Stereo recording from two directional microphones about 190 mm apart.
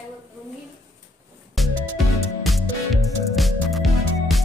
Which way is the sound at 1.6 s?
Centre (ahead or behind).